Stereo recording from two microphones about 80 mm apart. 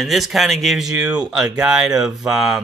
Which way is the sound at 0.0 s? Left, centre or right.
Centre.